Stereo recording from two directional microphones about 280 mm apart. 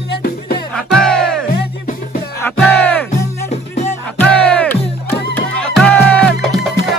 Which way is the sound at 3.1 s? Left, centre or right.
Left.